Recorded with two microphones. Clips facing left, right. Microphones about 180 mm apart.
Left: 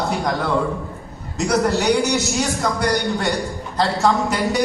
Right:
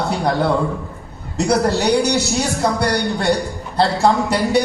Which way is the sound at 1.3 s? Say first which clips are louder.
Right 2 dB; 30° right (ahead or behind).